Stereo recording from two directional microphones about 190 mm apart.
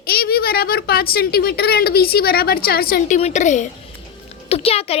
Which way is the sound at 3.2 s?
35° left (ahead or behind).